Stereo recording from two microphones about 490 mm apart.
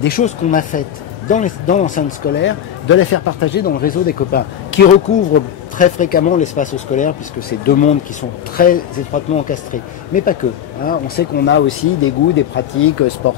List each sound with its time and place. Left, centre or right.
0.0 s speech: centre